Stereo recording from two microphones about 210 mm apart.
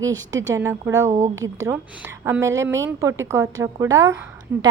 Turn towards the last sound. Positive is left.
turn(degrees=-15)  # may be behind; listen again after turning